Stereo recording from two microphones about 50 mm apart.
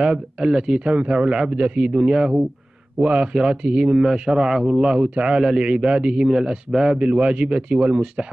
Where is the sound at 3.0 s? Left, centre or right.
Right.